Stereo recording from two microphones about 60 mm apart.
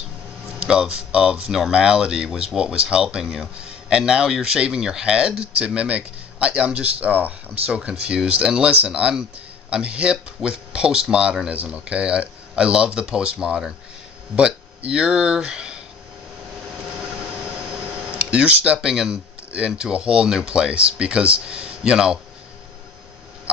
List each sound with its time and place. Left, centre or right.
0.5 s speech: centre
7.7 s speech: centre
17.5 s speech: centre